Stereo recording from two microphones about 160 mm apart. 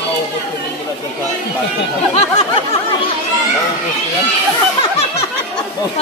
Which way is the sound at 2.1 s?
45° left (ahead or behind).